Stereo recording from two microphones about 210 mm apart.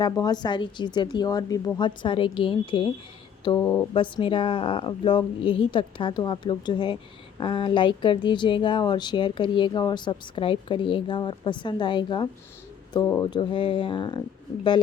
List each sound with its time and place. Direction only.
0.0 s speech: 20° left (ahead or behind)
3.6 s speech: 10° left (ahead or behind)
3.9 s speech: 25° left (ahead or behind)